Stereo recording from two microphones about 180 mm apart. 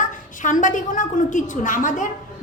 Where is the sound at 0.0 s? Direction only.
45° left (ahead or behind).